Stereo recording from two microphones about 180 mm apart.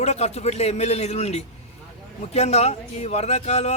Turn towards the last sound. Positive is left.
turn(degrees=40)  # may be behind; listen again after turning